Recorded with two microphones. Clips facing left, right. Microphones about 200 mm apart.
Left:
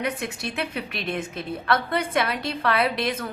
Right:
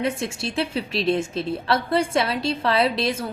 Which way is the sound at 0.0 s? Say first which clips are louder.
Right 3 dB; 30° right (ahead or behind).